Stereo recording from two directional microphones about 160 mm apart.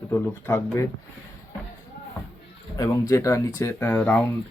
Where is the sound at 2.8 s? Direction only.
20° left (ahead or behind).